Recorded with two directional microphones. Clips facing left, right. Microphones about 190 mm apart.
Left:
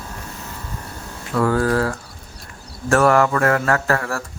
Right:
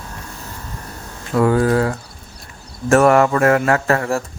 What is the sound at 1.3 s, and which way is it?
Speech, 20° right (ahead or behind).